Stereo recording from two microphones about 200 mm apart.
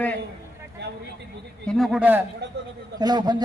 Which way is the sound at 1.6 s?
Centre (ahead or behind).